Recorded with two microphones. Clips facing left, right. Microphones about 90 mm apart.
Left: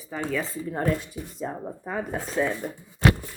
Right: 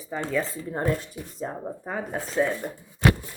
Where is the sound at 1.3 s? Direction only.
40° right (ahead or behind).